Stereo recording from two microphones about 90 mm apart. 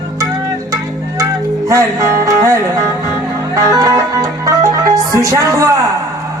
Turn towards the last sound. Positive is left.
turn(degrees=-40)  # may be behind; listen again after turning